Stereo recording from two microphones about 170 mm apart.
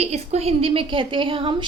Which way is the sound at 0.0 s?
40° right (ahead or behind).